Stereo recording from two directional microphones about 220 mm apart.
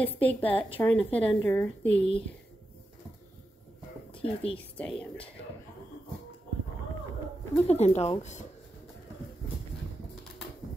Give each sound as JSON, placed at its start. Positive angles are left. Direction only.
{"t": 0.0, "sound": "a woman's voice", "side_deg": 5}
{"t": 0.5, "sound": "speech", "side_deg": 25}
{"t": 0.7, "sound": "a woman's voice", "side_deg": 5}
{"t": 1.9, "sound": "speech", "side_deg": 25}
{"t": 4.2, "sound": "speech", "side_deg": 25}
{"t": 4.6, "sound": "a woman's voice", "side_deg": 5}
{"t": 7.5, "sound": "speech", "side_deg": 30}